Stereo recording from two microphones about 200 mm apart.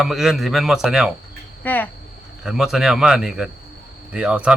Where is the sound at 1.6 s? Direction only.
10° left (ahead or behind).